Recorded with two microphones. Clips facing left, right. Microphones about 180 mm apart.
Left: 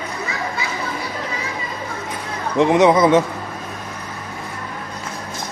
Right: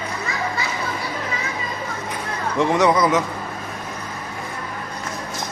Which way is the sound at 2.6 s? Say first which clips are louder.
Left 4 dB; 20° left (ahead or behind).